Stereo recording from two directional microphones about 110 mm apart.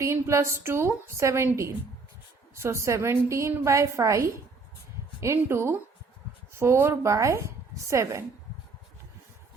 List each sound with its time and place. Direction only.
0.0 s a woman's voice: 25° right (ahead or behind)